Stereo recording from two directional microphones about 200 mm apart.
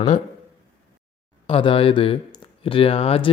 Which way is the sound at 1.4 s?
25° left (ahead or behind).